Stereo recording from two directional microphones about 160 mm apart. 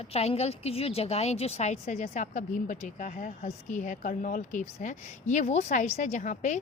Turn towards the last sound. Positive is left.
turn(degrees=50)  # may be behind; listen again after turning